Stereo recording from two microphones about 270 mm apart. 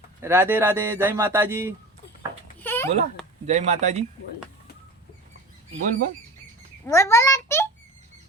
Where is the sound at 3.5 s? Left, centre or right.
Right.